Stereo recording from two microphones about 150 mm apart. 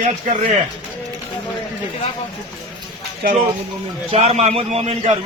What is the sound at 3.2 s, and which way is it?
Speech, 80° right.